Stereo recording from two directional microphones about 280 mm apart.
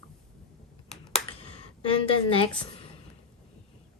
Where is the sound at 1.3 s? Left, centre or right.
Centre.